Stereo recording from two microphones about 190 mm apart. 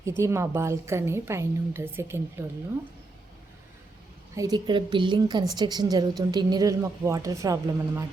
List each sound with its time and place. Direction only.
0.2 s a woman's voice: 15° right (ahead or behind)
4.4 s a woman's voice: 20° right (ahead or behind)